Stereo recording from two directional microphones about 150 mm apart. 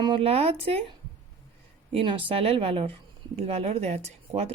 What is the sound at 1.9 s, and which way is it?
Speech, 35° right (ahead or behind).